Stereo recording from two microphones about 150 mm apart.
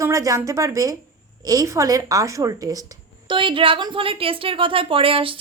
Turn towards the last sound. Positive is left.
turn(degrees=-35)  # may be behind; listen again after turning